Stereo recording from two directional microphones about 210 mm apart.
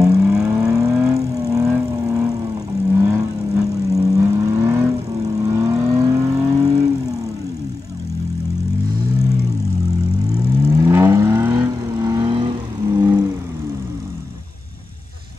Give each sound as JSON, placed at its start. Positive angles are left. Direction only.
{"t": 0.2, "sound": "vehicle", "side_deg": -5}
{"t": 0.7, "sound": "vehicle", "side_deg": -15}
{"t": 10.6, "sound": "vehicle", "side_deg": -15}